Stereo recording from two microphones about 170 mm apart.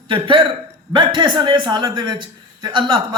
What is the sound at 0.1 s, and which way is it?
A man's voice, 30° right (ahead or behind).